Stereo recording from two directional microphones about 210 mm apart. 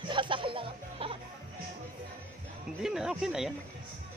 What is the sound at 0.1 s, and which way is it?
Music, 25° right (ahead or behind).